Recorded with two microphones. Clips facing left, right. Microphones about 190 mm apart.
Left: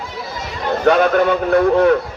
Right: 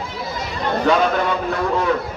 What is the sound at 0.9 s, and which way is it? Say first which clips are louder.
A man's voice: left 5 dB; 60° left (ahead or behind).